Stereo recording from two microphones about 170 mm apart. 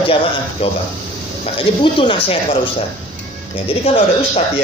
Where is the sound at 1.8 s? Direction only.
30° left (ahead or behind).